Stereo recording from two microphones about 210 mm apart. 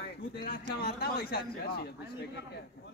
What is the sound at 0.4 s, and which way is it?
Speech, 45° left (ahead or behind).